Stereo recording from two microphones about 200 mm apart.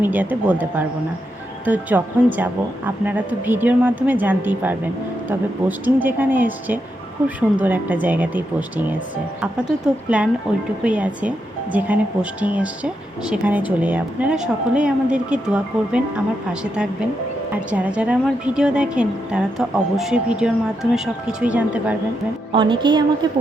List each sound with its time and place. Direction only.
0.0 s a woman's voice: 10° right (ahead or behind)
22.5 s music: 25° right (ahead or behind)